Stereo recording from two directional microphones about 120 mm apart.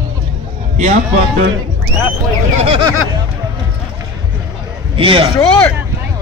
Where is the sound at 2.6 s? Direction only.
50° right (ahead or behind).